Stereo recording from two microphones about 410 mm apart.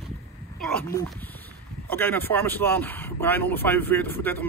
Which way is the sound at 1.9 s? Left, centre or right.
Centre.